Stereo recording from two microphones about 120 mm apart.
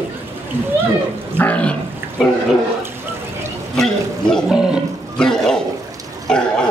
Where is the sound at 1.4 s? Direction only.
10° left (ahead or behind).